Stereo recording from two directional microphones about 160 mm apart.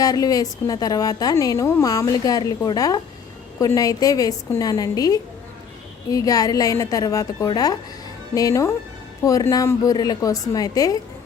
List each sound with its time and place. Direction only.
0.0 s a woman's voice: 25° left (ahead or behind)